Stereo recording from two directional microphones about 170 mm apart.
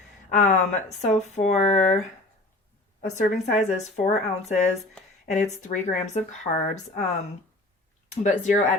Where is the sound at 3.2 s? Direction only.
50° left (ahead or behind).